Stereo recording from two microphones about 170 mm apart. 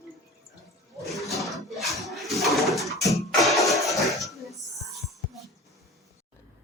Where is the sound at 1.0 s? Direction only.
Centre (ahead or behind).